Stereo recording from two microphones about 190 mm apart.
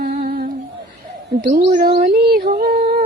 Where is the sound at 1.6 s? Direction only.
35° right (ahead or behind).